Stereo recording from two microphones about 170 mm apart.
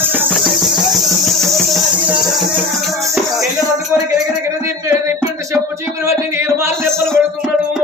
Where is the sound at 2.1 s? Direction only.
Centre (ahead or behind).